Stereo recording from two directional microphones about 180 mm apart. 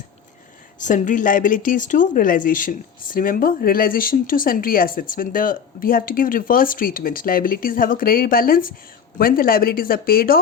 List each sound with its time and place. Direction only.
0.8 s speech: 45° left (ahead or behind)